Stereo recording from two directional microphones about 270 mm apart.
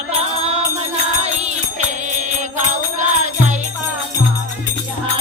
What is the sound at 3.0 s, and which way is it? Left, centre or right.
Music, right.